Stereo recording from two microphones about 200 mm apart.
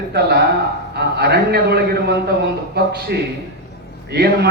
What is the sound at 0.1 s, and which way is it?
A man's voice, 55° right (ahead or behind).